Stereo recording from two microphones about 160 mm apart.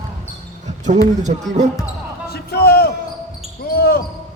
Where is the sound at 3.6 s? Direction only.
75° left (ahead or behind).